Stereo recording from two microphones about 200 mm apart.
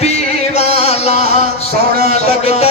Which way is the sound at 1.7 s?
50° right (ahead or behind).